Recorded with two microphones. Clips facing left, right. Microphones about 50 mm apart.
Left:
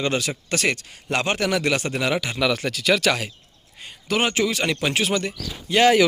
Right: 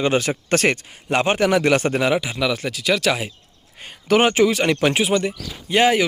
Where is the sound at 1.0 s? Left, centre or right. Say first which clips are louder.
Right 5 dB; right.